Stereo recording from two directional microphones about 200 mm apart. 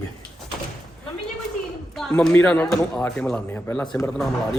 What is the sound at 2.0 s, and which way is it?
Speech, centre (ahead or behind).